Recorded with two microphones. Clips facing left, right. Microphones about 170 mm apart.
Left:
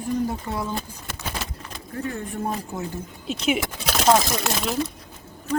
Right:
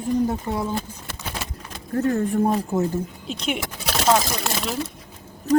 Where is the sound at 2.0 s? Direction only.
40° right (ahead or behind).